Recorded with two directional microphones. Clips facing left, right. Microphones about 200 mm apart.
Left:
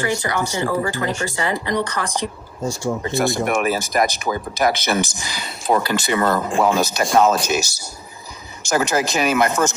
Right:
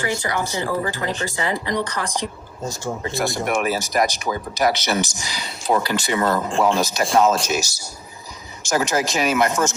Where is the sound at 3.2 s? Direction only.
55° left (ahead or behind).